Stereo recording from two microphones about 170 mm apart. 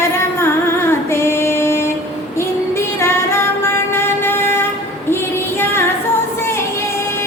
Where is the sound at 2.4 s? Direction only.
15° left (ahead or behind).